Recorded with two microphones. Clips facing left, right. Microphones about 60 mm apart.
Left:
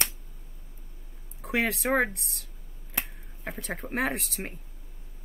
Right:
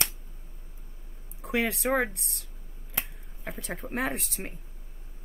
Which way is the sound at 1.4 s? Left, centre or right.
Centre.